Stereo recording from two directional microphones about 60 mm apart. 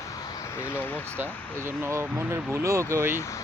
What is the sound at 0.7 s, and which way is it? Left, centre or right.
Speech, left.